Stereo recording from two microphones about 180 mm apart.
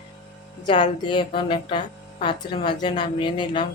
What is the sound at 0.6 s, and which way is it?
Speech, 25° left (ahead or behind).